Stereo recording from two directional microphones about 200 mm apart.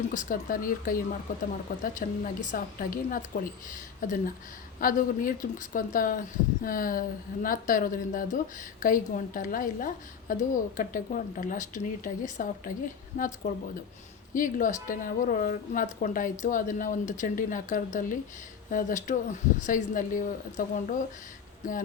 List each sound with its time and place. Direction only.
0.1 s a woman's voice: 40° left (ahead or behind)